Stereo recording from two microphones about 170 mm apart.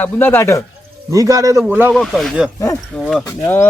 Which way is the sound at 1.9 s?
Centre (ahead or behind).